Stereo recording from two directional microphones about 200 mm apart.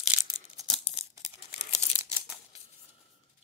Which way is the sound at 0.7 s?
30° left (ahead or behind).